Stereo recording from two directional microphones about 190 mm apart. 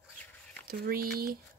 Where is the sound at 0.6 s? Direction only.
50° right (ahead or behind).